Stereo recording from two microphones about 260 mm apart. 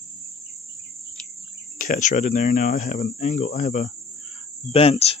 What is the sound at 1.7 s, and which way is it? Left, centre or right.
Speech, left.